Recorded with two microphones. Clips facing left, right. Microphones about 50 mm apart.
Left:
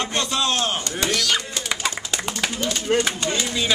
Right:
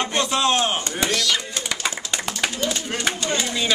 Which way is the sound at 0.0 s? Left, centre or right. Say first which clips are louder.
Right 2 dB; centre.